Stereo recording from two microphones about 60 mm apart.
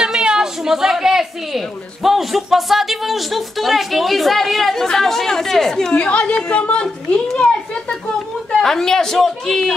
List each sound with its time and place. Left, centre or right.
0.0 s a sound: centre
2.0 s speech: centre
5.9 s a woman's voice: centre
8.5 s speech: centre